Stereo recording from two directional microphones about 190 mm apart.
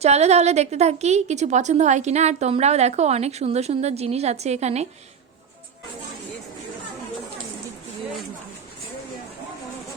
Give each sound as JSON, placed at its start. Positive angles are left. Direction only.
{"t": 0.0, "sound": "a woman's voice", "side_deg": -35}